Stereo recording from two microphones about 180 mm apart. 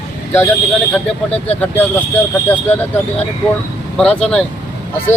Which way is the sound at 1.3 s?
35° left (ahead or behind).